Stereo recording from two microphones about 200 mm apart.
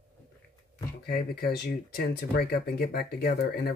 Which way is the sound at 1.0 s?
50° left (ahead or behind).